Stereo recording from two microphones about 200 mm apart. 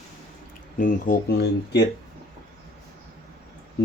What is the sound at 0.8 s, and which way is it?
Speech, 50° left (ahead or behind).